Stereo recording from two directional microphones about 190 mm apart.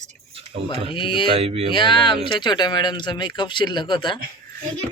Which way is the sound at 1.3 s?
30° right (ahead or behind).